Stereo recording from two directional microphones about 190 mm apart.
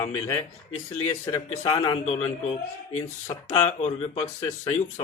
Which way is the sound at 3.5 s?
30° left (ahead or behind).